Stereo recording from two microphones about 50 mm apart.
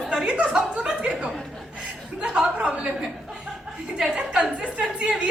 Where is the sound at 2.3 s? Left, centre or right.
Right.